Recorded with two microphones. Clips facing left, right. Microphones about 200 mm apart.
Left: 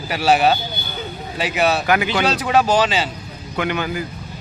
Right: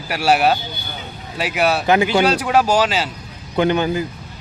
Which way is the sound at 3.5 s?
30° right (ahead or behind).